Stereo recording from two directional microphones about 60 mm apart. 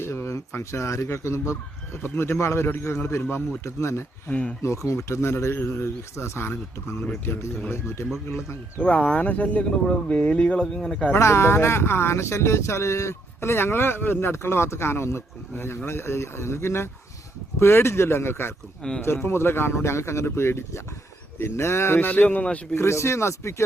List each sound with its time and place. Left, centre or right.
0.0 s speech: left
4.3 s speech: left
4.6 s speech: left
8.8 s speech: left
10.6 s speech: centre
11.1 s speech: left
18.8 s speech: centre
19.0 s speech: left
22.0 s speech: left
22.7 s speech: left